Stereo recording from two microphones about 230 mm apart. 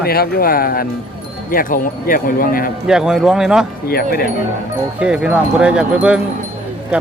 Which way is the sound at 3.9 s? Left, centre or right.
Left.